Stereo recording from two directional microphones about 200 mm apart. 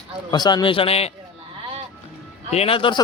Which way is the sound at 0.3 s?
20° left (ahead or behind).